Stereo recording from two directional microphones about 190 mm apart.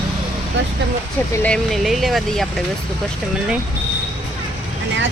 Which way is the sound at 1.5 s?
Centre (ahead or behind).